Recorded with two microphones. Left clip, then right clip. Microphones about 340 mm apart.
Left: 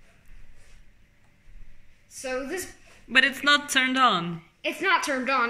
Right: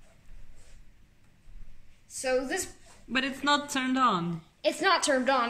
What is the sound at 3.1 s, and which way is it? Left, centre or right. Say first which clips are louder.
Speech: left 7 dB; centre.